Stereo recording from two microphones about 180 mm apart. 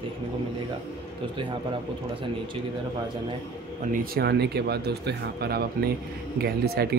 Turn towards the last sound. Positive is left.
turn(degrees=-60)  # may be behind; listen again after turning